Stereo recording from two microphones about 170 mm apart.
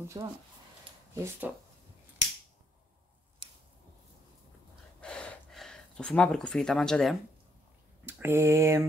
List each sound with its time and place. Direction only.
0.2 s speech: 25° right (ahead or behind)
5.0 s gasp: 5° left (ahead or behind)
8.0 s speech: 15° right (ahead or behind)